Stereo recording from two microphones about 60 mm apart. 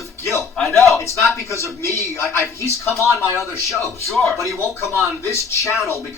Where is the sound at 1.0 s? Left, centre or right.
Left.